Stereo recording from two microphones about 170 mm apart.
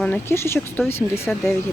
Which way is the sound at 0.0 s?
10° left (ahead or behind).